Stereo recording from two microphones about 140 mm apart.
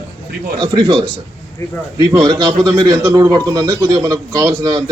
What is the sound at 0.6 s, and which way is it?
Speech, 30° right (ahead or behind).